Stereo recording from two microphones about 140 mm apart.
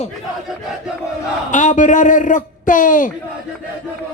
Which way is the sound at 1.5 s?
60° left (ahead or behind).